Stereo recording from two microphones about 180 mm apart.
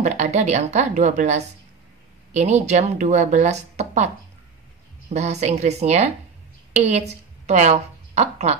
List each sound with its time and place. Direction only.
0.0 s speech: 40° right (ahead or behind)
5.1 s a woman's voice: 35° right (ahead or behind)